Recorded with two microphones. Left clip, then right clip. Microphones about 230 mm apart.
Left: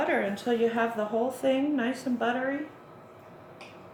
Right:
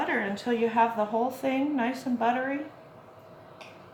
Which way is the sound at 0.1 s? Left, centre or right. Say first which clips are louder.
Left 1 dB; right.